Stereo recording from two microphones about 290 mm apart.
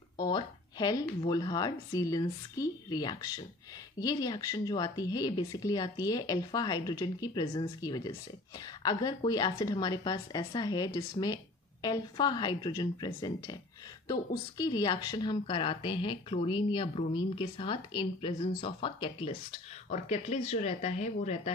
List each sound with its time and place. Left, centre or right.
0.2 s speech: centre